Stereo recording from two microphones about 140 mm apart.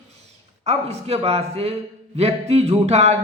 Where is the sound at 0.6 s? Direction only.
50° right (ahead or behind).